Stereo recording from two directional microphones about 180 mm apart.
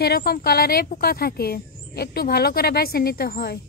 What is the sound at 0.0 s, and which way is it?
A woman's voice, 60° left (ahead or behind).